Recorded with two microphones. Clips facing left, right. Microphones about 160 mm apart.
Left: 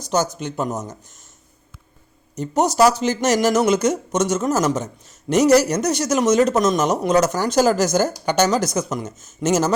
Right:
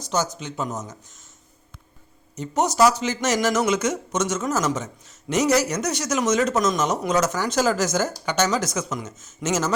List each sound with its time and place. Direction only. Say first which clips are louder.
0.3 s speech: left 5 dB; 55° left (ahead or behind)
2.4 s speech: left 3 dB; 35° left (ahead or behind)